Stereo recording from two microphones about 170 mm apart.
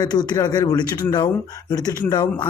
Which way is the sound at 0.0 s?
25° left (ahead or behind).